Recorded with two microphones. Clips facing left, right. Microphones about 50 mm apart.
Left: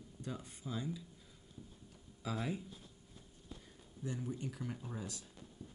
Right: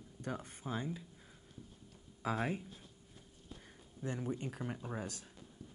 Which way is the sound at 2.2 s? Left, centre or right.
Right.